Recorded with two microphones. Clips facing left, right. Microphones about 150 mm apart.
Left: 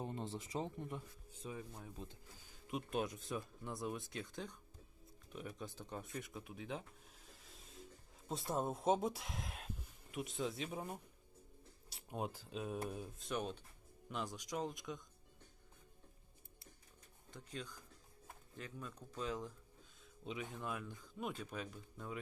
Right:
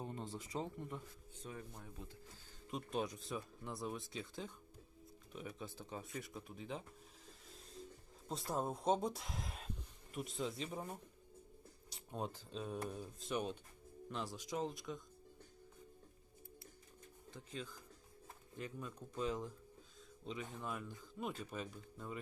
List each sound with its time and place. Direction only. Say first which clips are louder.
0.0 s speech: left 2 dB; 20° left (ahead or behind)
1.5 s speech: left 2 dB; 10° left (ahead or behind)
7.3 s a sound: right 2 dB; centre (ahead or behind)
8.3 s speech: left 1 dB; centre (ahead or behind)
13.1 s speech: right 3 dB; 5° right (ahead or behind)
17.3 s speech: even; 5° right (ahead or behind)
20.2 s speech: left 1 dB; 5° left (ahead or behind)